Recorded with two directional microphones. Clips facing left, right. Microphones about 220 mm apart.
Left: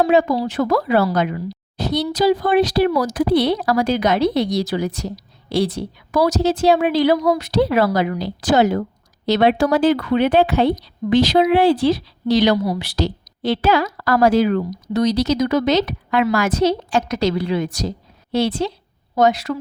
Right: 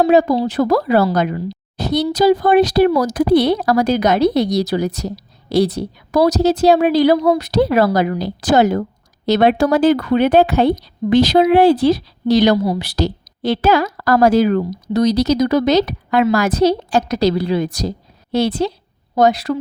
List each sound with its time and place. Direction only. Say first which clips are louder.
0.0 s a woman's voice: right 3 dB; 40° right (ahead or behind)
12.5 s speech: right 3 dB; 25° right (ahead or behind)
12.8 s a woman's voice: right 2 dB; 40° right (ahead or behind)